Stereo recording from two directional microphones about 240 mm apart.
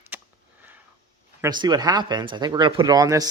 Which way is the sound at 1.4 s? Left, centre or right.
Centre.